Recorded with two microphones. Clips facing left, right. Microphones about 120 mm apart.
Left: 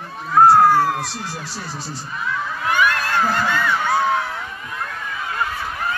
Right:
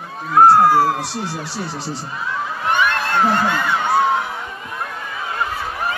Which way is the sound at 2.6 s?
25° right (ahead or behind).